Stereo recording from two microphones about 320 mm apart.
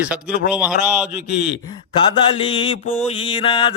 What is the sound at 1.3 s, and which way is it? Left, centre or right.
Speech, left.